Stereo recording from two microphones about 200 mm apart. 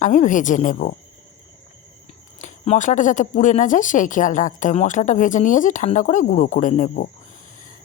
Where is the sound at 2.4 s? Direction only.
40° left (ahead or behind).